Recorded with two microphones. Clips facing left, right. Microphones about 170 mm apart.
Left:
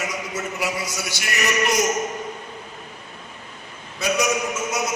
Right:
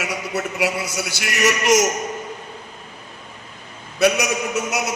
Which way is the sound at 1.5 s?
90° right.